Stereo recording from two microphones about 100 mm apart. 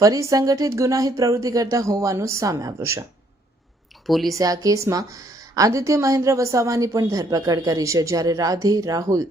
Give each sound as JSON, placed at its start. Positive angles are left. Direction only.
{"t": 0.0, "sound": "a woman's voice", "side_deg": -35}
{"t": 4.0, "sound": "speech", "side_deg": 0}
{"t": 4.4, "sound": "a woman's voice", "side_deg": -35}